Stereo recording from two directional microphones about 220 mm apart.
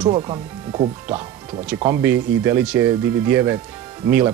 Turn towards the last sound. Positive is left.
turn(degrees=-10)  # may be behind; listen again after turning